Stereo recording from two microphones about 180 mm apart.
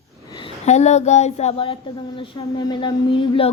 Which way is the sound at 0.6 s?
40° left (ahead or behind).